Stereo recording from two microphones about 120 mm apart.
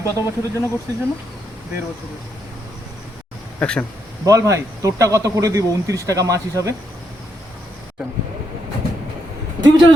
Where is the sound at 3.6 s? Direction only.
10° left (ahead or behind).